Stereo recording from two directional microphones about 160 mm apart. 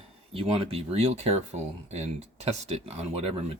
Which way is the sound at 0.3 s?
35° right (ahead or behind).